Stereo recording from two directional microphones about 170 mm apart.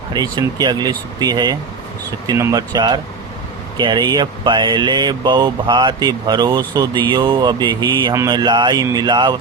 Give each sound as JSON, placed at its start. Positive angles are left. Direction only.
{"t": 0.1, "sound": "speech", "side_deg": -25}